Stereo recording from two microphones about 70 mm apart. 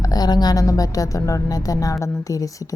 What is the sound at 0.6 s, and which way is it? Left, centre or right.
A woman's voice, left.